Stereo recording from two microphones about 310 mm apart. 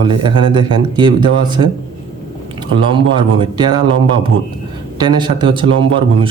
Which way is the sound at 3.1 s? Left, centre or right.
Centre.